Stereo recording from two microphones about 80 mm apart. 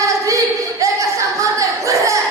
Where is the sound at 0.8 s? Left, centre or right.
Right.